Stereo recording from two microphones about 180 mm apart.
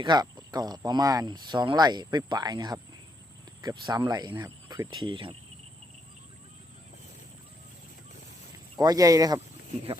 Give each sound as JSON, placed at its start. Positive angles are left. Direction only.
{"t": 0.0, "sound": "speech", "side_deg": -25}
{"t": 8.8, "sound": "speech", "side_deg": -20}